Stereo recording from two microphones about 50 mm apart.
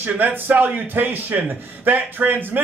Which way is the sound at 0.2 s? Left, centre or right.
Right.